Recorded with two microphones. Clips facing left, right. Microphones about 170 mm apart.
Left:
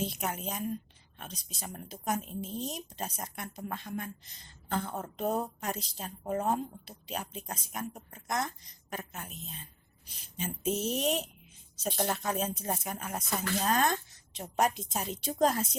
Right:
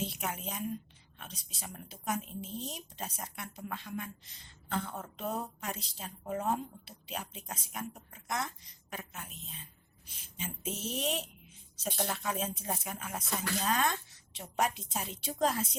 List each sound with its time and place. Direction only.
0.0 s a woman's voice: 40° left (ahead or behind)